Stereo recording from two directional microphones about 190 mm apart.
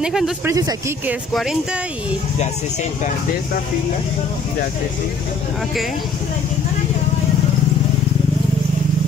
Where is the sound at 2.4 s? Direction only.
40° left (ahead or behind).